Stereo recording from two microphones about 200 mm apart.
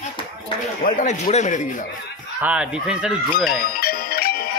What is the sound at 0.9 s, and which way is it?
Speech, 40° left (ahead or behind).